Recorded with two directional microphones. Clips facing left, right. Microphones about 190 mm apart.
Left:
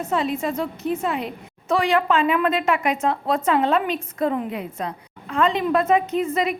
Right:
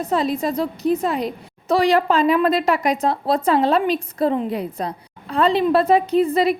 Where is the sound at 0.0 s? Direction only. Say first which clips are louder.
Right 3 dB; 35° right (ahead or behind).